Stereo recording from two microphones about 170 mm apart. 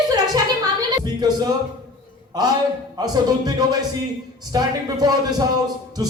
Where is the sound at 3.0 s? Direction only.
25° right (ahead or behind).